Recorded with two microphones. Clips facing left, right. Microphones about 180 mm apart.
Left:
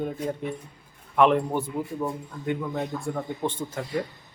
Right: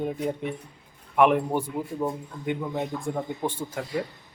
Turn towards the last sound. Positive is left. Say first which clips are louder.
# even
turn(degrees=-10)  # may be behind; listen again after turning